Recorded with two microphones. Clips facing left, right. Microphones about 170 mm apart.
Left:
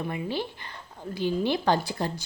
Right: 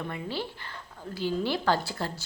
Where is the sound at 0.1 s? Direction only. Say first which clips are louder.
Left 3 dB; 15° left (ahead or behind).